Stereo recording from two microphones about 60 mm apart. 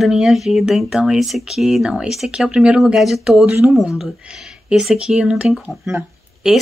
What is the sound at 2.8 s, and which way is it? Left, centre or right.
Speech, centre.